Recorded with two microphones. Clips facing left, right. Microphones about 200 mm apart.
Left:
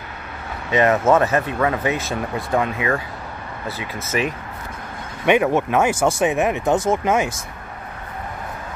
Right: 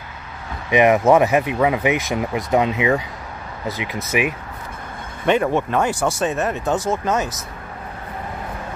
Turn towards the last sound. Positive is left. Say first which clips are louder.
# left 2 dB
turn(degrees=15)  # may be behind; listen again after turning